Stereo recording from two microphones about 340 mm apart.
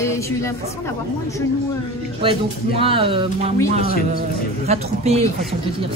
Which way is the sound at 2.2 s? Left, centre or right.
Centre.